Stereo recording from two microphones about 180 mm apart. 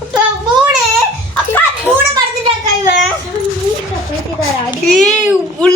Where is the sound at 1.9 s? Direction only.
5° left (ahead or behind).